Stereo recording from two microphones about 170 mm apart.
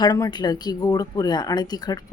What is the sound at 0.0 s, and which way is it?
Speech, 25° left (ahead or behind).